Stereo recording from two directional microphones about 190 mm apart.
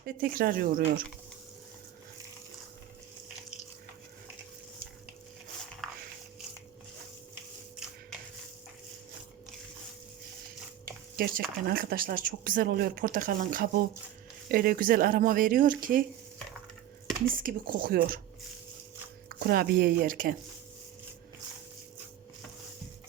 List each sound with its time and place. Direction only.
0.0 s speech: 50° right (ahead or behind)
5.8 s biting: centre (ahead or behind)
11.2 s speech: 50° right (ahead or behind)
17.4 s speech: 50° right (ahead or behind)
19.3 s speech: 55° right (ahead or behind)